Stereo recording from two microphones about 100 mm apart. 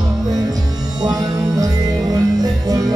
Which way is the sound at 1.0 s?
35° right (ahead or behind).